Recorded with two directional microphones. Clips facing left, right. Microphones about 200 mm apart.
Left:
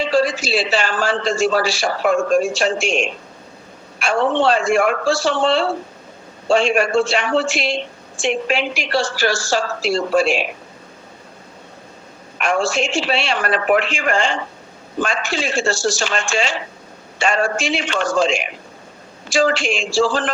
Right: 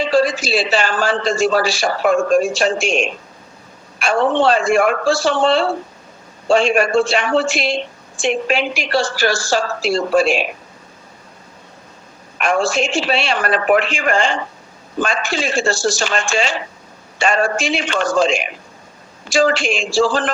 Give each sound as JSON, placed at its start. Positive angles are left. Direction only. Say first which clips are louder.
{"t": 0.0, "sound": "speech", "louder": "right 2 dB", "side_deg": -45}
{"t": 12.4, "sound": "speech", "louder": "right 2 dB", "side_deg": -40}
{"t": 15.0, "sound": "speech", "louder": "right 2 dB", "side_deg": -40}
{"t": 17.2, "sound": "speech", "louder": "right 2 dB", "side_deg": -50}
{"t": 17.9, "sound": "speech", "louder": "right 2 dB", "side_deg": -40}
{"t": 19.4, "sound": "speech", "louder": "right 2 dB", "side_deg": -40}